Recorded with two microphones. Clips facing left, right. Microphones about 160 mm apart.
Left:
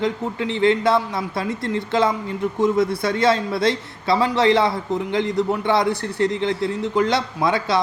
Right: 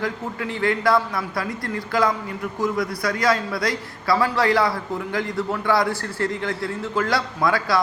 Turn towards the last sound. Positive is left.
turn(degrees=20)  # may be behind; listen again after turning